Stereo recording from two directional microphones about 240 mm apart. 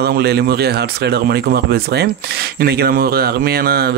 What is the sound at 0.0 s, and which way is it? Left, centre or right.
Speech, right.